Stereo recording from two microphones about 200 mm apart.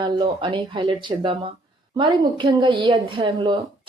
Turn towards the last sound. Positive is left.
turn(degrees=-25)  # may be behind; listen again after turning